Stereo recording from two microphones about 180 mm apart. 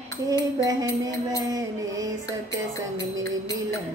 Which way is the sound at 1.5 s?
20° right (ahead or behind).